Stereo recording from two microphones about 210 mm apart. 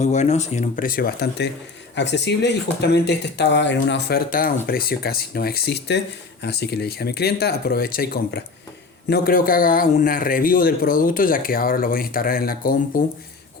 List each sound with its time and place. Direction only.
0.0 s speech: 35° left (ahead or behind)